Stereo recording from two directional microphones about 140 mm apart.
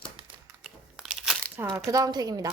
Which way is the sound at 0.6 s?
Centre (ahead or behind).